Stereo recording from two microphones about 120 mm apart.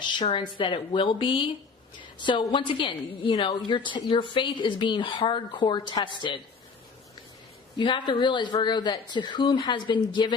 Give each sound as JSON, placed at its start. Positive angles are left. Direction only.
{"t": 0.3, "sound": "a woman's voice", "side_deg": 40}
{"t": 7.8, "sound": "speech", "side_deg": 40}